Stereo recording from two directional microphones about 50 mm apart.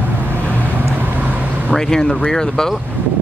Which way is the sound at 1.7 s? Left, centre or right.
Centre.